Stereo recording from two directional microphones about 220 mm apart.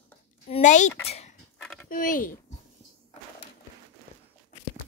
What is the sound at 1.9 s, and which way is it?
Speech, 40° left (ahead or behind).